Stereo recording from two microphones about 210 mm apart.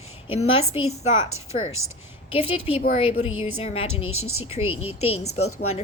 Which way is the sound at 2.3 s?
25° left (ahead or behind).